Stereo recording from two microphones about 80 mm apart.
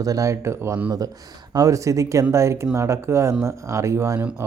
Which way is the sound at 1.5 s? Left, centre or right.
Right.